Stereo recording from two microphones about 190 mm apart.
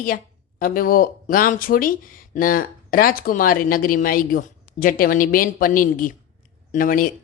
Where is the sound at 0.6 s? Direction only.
50° left (ahead or behind).